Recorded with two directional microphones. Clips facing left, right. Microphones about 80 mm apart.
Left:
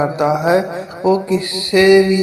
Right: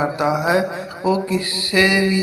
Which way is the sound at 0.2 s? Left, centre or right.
Left.